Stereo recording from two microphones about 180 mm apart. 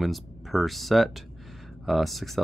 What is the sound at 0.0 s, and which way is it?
Speech, centre (ahead or behind).